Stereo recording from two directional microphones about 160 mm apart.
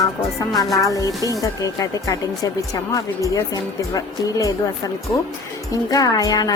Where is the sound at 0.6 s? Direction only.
Centre (ahead or behind).